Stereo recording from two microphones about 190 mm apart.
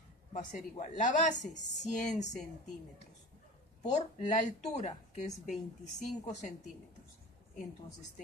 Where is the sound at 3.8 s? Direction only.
35° left (ahead or behind).